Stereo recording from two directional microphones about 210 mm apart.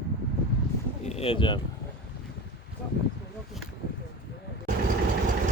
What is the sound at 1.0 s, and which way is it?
Speech, 30° left (ahead or behind).